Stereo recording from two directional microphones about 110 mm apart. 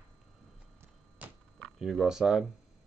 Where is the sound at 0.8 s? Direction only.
15° right (ahead or behind).